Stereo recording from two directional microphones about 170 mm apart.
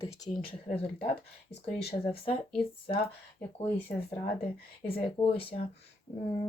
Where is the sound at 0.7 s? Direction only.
35° left (ahead or behind).